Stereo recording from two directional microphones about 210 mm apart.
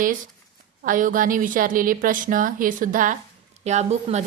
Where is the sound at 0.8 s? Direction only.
40° right (ahead or behind).